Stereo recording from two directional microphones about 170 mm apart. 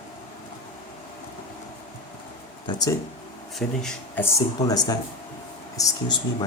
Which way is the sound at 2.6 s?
25° left (ahead or behind).